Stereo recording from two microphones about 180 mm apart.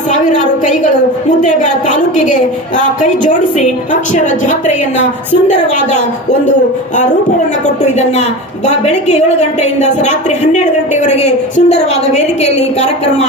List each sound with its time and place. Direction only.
0.1 s a sound: 45° left (ahead or behind)
1.4 s a woman's voice: 45° left (ahead or behind)
8.6 s a woman's voice: 40° left (ahead or behind)